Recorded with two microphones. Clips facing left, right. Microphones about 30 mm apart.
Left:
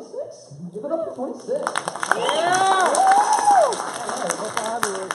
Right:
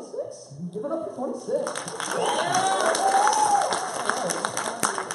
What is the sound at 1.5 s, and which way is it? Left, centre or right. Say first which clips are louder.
Speech: left 6 dB; left.